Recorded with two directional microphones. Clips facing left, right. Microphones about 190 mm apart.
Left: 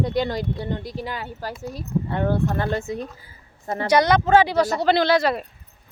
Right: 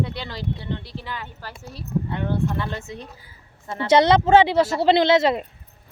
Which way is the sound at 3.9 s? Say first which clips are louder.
Right 2 dB; 25° right (ahead or behind).